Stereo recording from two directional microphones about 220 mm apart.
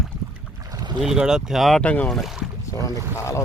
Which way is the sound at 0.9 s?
5° right (ahead or behind).